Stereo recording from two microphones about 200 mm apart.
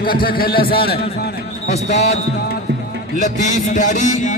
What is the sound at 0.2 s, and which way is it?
Speech, 45° left (ahead or behind).